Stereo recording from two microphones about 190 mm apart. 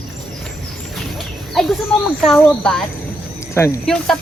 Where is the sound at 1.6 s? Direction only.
Centre (ahead or behind).